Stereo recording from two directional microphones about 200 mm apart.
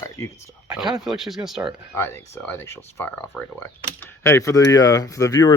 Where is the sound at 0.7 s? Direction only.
Centre (ahead or behind).